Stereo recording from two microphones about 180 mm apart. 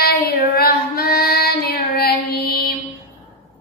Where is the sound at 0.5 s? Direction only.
60° left (ahead or behind).